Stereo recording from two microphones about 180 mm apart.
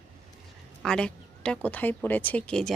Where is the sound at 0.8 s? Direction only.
5° left (ahead or behind).